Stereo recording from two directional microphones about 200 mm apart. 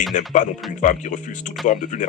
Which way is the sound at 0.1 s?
40° left (ahead or behind).